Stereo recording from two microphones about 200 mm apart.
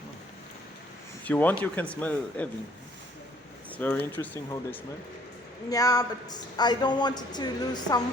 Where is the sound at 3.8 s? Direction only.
10° left (ahead or behind).